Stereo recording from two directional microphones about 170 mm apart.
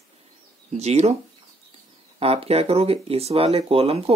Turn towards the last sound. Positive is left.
turn(degrees=-35)  # may be behind; listen again after turning